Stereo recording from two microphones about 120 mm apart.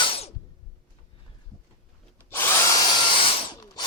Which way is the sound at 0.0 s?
50° left (ahead or behind).